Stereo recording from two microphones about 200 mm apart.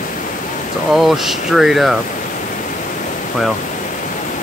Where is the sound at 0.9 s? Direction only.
Centre (ahead or behind).